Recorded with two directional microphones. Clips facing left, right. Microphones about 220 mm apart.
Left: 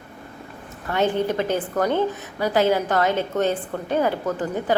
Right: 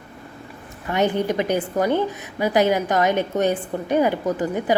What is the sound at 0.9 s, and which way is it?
A woman's voice, 15° right (ahead or behind).